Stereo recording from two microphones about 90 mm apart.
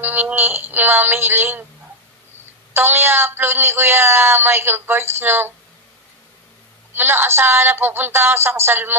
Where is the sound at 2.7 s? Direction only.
25° right (ahead or behind).